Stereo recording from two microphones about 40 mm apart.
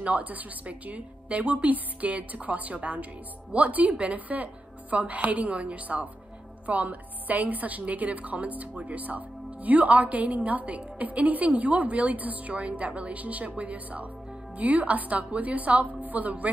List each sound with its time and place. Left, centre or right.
0.0 s a woman's voice: right